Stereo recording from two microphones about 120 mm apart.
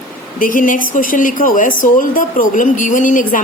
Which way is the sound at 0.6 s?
90° left.